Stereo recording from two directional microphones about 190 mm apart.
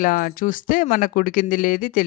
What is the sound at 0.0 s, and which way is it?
Speech, 45° left (ahead or behind).